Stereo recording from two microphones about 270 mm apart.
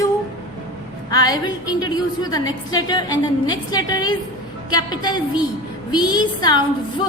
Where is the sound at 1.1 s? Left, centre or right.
Centre.